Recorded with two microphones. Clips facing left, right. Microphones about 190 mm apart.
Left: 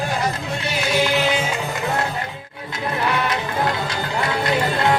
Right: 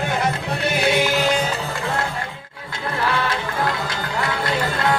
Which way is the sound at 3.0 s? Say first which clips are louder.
Even; 20° left (ahead or behind).